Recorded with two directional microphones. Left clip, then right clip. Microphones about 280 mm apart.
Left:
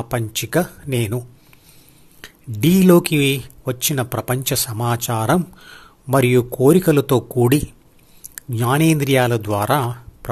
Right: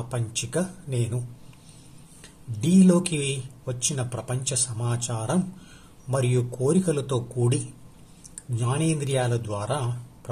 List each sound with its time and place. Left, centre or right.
0.1 s speech: left
2.2 s speech: left